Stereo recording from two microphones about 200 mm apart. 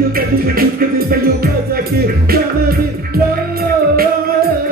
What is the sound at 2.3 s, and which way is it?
Music, 50° right (ahead or behind).